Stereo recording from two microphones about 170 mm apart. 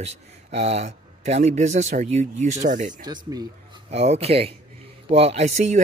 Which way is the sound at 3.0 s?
25° right (ahead or behind).